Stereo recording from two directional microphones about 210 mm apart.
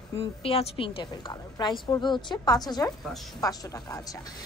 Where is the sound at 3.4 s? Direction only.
15° left (ahead or behind).